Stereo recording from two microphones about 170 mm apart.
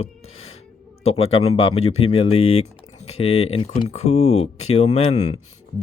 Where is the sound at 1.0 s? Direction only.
35° left (ahead or behind).